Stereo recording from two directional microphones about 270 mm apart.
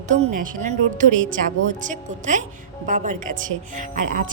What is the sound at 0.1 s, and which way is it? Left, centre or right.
Speech, right.